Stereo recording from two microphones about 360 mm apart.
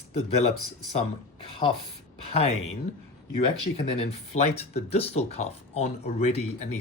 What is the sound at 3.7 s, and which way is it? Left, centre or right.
Speech, centre.